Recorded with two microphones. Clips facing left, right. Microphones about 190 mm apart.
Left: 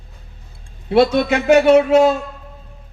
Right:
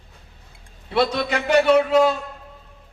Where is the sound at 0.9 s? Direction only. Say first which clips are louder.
Left 7 dB; 50° left (ahead or behind).